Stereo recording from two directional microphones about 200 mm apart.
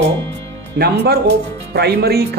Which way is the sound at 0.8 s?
55° right (ahead or behind).